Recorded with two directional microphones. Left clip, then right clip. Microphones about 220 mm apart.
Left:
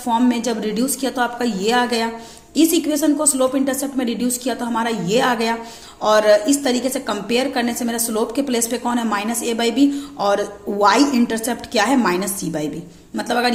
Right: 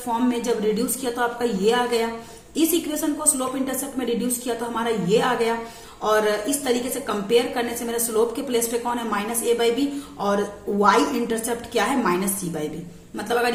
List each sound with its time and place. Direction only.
0.1 s a woman's voice: 35° left (ahead or behind)